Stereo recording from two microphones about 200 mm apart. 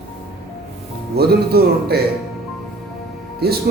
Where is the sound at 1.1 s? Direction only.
50° right (ahead or behind).